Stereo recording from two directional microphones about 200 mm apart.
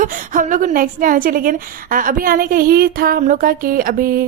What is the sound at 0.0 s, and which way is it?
A woman's voice, 40° right (ahead or behind).